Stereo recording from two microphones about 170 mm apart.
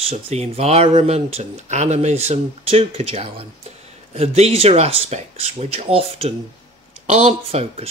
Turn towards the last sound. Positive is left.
turn(degrees=-35)  # may be behind; listen again after turning